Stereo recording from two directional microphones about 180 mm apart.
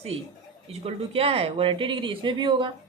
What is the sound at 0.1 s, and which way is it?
Speech, 90° right.